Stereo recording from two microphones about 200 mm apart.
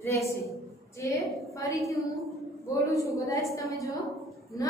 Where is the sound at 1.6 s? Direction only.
15° left (ahead or behind).